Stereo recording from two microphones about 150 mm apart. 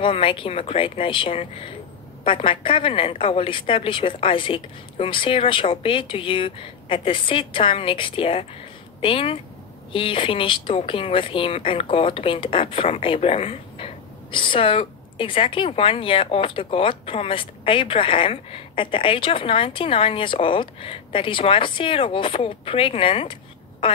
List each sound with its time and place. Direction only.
0.0 s speech: 35° left (ahead or behind)